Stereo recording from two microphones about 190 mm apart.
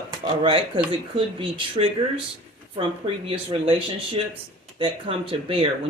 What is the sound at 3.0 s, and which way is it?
Speech, 30° right (ahead or behind).